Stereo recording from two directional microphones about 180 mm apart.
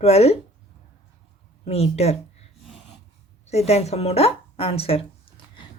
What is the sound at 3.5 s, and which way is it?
A woman's voice, 35° left (ahead or behind).